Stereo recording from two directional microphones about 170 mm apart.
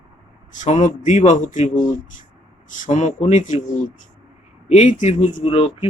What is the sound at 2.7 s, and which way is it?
Speech, 45° left (ahead or behind).